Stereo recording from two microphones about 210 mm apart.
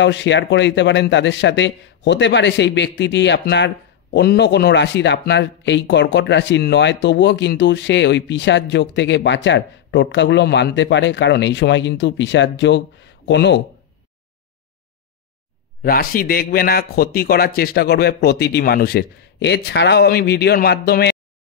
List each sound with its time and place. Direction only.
0.0 s a man's voice: 60° left (ahead or behind)
15.8 s a man's voice: 45° left (ahead or behind)